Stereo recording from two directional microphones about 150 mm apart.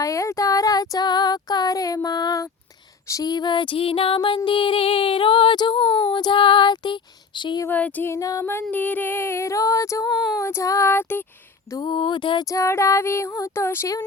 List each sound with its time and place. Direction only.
0.0 s a sound: 20° left (ahead or behind)
5.8 s female singing: 10° left (ahead or behind)
6.1 s female singing: 30° left (ahead or behind)
7.7 s female singing: 10° left (ahead or behind)
11.7 s female singing: 30° left (ahead or behind)